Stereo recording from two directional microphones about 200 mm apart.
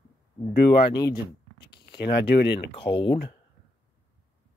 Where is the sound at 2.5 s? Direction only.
25° left (ahead or behind).